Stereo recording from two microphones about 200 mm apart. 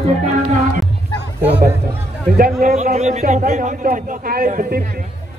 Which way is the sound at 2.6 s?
35° right (ahead or behind).